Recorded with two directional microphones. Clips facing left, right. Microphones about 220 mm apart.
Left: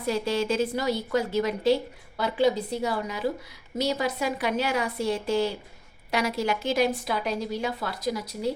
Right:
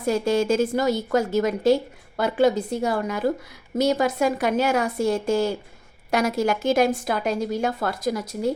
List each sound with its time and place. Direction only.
0.0 s a woman's voice: 45° right (ahead or behind)